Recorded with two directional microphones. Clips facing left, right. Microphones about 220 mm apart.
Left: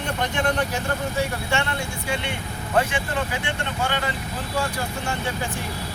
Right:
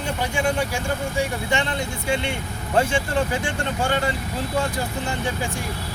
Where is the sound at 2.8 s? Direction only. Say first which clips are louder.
Right 2 dB; 30° right (ahead or behind).